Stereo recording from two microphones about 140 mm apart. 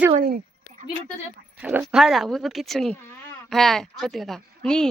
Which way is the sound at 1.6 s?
5° right (ahead or behind).